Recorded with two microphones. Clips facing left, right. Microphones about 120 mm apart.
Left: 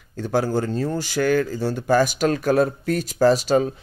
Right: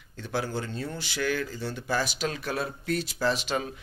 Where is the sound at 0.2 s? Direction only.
45° left (ahead or behind).